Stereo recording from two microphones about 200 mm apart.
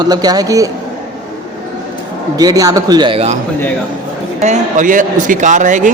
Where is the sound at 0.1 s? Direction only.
20° right (ahead or behind).